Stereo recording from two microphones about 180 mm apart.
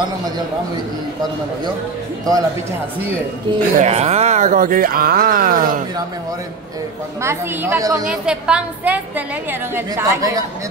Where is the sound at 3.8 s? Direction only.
35° right (ahead or behind).